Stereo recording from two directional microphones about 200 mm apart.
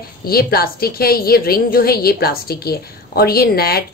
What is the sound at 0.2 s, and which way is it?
A woman's voice, 50° left (ahead or behind).